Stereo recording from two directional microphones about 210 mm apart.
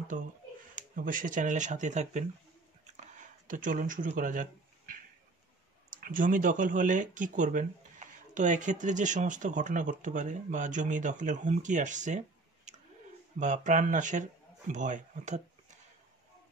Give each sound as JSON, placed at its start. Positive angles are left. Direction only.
{"t": 0.1, "sound": "speech", "side_deg": -35}
{"t": 3.0, "sound": "a sound", "side_deg": -40}
{"t": 5.9, "sound": "speech", "side_deg": -40}